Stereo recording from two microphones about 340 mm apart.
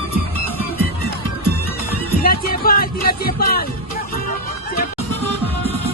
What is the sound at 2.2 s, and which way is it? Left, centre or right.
Music, left.